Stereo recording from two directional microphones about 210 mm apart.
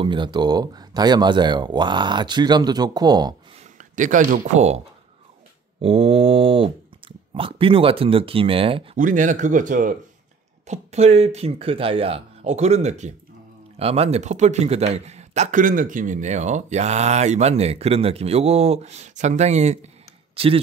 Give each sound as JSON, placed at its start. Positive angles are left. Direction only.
{"t": 0.0, "sound": "speech", "side_deg": -20}
{"t": 3.7, "sound": "speech", "side_deg": -35}
{"t": 8.9, "sound": "a man's voice", "side_deg": -40}